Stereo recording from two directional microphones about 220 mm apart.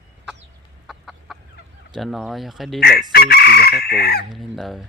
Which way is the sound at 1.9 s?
Centre (ahead or behind).